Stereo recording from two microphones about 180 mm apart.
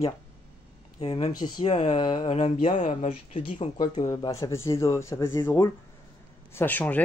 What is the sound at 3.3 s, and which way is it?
Speech, 30° left (ahead or behind).